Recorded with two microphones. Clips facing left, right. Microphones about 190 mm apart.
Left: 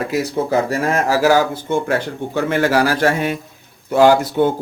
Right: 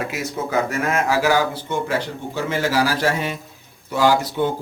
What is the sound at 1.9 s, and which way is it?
Speech, 60° left (ahead or behind).